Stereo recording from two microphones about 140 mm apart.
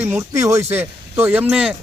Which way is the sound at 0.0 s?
20° right (ahead or behind).